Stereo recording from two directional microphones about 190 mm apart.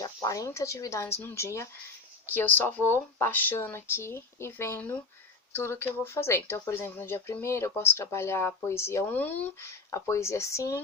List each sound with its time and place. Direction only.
0.0 s speech: 15° left (ahead or behind)